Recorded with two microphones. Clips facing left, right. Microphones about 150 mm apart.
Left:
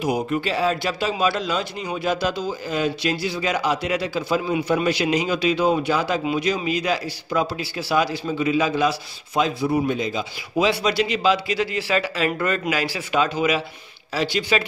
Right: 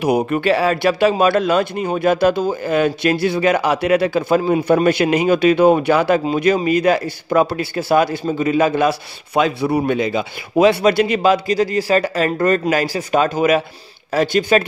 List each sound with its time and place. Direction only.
0.0 s a man's voice: 65° right (ahead or behind)